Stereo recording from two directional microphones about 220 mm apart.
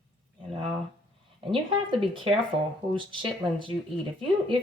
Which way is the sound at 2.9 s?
20° right (ahead or behind).